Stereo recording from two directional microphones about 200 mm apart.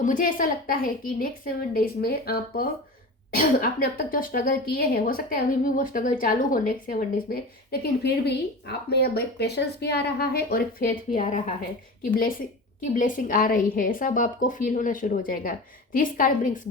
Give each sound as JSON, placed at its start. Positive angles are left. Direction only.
{"t": 0.0, "sound": "a woman's voice", "side_deg": 45}
{"t": 12.8, "sound": "a woman's voice", "side_deg": 40}